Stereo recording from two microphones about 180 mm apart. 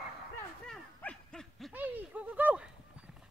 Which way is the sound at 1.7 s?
10° right (ahead or behind).